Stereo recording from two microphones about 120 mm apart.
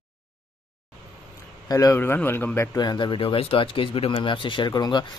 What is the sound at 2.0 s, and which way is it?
Speech, 20° left (ahead or behind).